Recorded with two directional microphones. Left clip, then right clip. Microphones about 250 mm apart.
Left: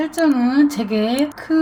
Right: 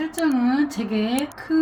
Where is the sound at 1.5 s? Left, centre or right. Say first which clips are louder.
Left 3 dB; left.